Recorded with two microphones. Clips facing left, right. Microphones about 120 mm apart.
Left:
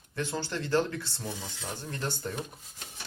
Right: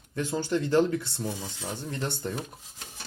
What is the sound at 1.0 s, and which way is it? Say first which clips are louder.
Speech: right 4 dB; 60° right (ahead or behind).